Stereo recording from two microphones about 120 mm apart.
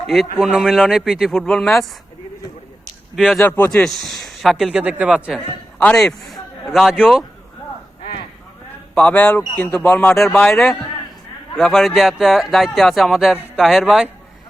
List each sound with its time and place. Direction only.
0.1 s speech: centre (ahead or behind)
3.7 s speech: 5° left (ahead or behind)
5.8 s a man's voice: 5° left (ahead or behind)
9.0 s a man's voice: 10° left (ahead or behind)
11.5 s speech: 5° left (ahead or behind)